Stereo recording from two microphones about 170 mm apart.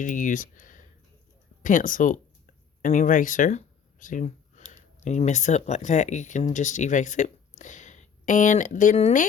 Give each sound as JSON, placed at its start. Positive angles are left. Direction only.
{"t": 0.0, "sound": "speech", "side_deg": 50}
{"t": 4.0, "sound": "a sound", "side_deg": 50}
{"t": 5.0, "sound": "speech", "side_deg": 45}